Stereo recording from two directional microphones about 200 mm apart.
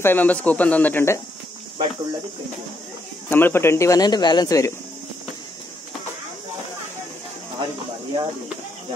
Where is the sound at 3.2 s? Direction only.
10° left (ahead or behind).